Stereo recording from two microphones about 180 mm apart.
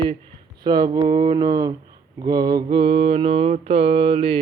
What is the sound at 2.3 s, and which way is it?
Mantra, 20° right (ahead or behind).